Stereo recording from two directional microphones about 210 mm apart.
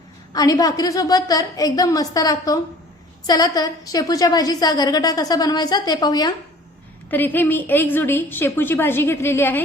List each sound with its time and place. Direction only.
0.3 s a woman's voice: 15° left (ahead or behind)
7.1 s a woman's voice: 10° left (ahead or behind)